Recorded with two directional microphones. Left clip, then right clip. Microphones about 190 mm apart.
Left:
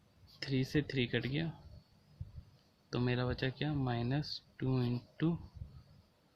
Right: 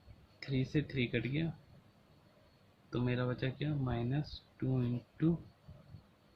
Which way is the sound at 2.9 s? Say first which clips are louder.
Even; 65° left (ahead or behind).